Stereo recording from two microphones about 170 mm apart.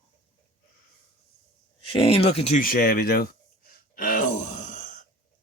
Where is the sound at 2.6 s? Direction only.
60° left (ahead or behind).